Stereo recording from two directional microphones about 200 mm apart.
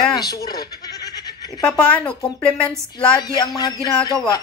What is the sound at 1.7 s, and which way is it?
A woman's voice, 5° left (ahead or behind).